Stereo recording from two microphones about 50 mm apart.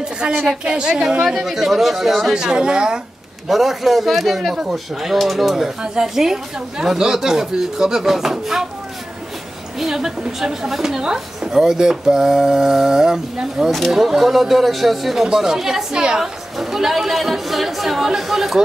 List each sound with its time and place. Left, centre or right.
0.7 s a woman's voice: centre
1.2 s speech: centre
2.3 s a woman's voice: centre
3.4 s a woman's voice: centre
9.8 s a woman's voice: centre
13.7 s a woman's voice: centre